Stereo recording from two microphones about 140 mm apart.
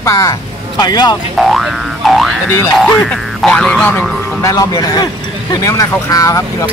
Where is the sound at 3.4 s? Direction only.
5° left (ahead or behind).